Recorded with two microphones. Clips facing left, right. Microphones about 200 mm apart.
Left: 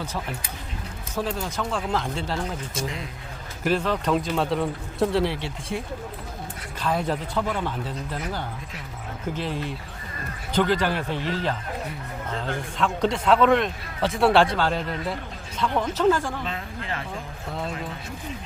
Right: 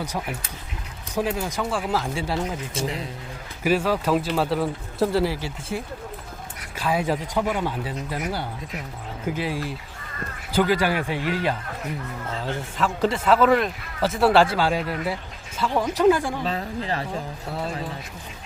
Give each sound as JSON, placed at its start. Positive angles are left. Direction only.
{"t": 0.0, "sound": "a man's voice", "side_deg": -15}
{"t": 2.7, "sound": "speech", "side_deg": -35}
{"t": 3.6, "sound": "a man's voice", "side_deg": -10}
{"t": 12.7, "sound": "a man's voice", "side_deg": -5}
{"t": 16.4, "sound": "speech", "side_deg": -35}
{"t": 17.5, "sound": "a man's voice", "side_deg": -5}